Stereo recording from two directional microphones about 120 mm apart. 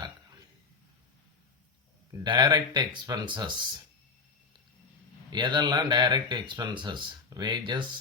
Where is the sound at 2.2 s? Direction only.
40° right (ahead or behind).